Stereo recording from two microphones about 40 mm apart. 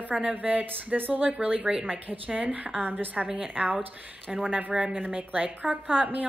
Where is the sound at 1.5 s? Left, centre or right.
Right.